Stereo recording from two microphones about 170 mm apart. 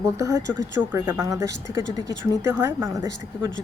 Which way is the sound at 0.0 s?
20° right (ahead or behind).